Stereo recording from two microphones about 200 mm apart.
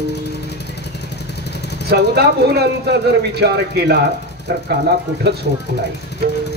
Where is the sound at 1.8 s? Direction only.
50° right (ahead or behind).